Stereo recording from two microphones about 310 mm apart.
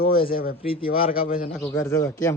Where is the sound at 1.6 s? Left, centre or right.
Centre.